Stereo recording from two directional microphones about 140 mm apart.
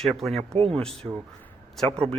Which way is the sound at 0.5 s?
40° right (ahead or behind).